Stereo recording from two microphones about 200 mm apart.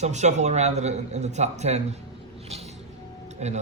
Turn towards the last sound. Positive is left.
turn(degrees=-35)  # may be behind; listen again after turning